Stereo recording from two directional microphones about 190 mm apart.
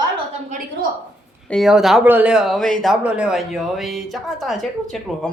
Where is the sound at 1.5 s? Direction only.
Centre (ahead or behind).